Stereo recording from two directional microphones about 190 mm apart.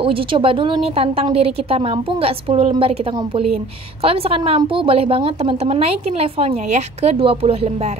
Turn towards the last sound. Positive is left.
turn(degrees=-35)  # may be behind; listen again after turning